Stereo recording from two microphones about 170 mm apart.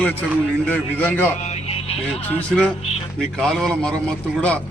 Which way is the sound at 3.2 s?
Centre (ahead or behind).